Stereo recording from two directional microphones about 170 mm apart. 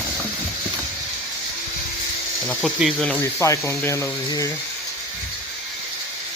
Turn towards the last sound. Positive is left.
turn(degrees=20)  # may be behind; listen again after turning